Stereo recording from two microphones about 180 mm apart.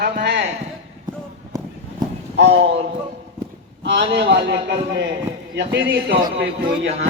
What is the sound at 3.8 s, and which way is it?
Speech, 75° right (ahead or behind).